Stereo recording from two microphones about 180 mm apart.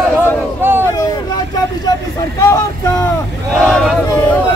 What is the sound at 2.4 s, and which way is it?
Speech, 20° left (ahead or behind).